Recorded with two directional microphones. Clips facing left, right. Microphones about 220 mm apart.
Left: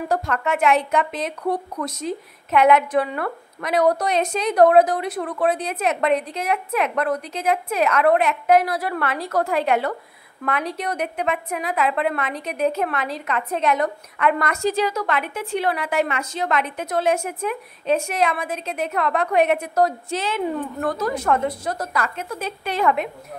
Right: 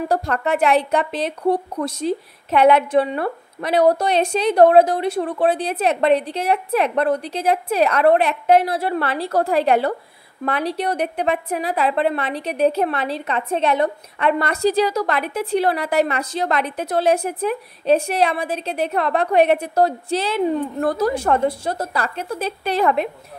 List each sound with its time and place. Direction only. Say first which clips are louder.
0.1 s a woman's voice: right 1 dB; 35° right (ahead or behind)